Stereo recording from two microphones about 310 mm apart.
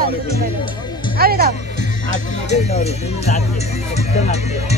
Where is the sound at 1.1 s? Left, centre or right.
Right.